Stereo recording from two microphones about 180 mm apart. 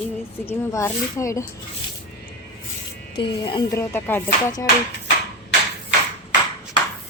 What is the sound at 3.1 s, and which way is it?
Speech, 25° left (ahead or behind).